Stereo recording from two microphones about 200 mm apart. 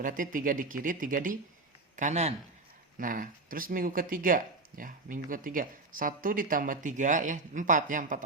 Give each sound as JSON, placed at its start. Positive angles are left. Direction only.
{"t": 0.0, "sound": "speech", "side_deg": -40}